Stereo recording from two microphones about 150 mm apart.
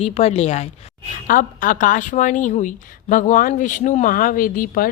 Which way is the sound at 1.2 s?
65° left (ahead or behind).